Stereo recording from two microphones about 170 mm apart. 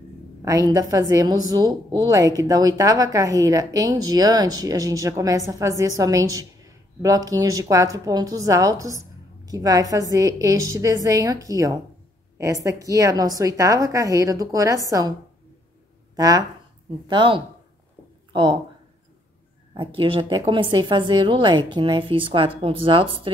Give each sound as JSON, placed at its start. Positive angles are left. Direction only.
{"t": 0.5, "sound": "a woman's voice", "side_deg": -20}
{"t": 16.2, "sound": "a woman's voice", "side_deg": -20}
{"t": 19.7, "sound": "a woman's voice", "side_deg": -30}